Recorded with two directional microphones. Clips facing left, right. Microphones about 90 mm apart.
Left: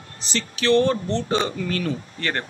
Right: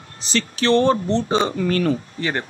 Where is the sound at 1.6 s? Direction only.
45° right (ahead or behind).